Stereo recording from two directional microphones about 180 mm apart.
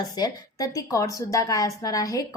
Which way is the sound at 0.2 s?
20° left (ahead or behind).